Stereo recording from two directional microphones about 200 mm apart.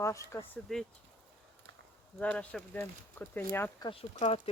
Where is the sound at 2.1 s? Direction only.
5° left (ahead or behind).